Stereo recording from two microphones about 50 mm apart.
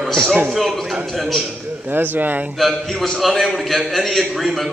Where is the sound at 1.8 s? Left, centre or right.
Right.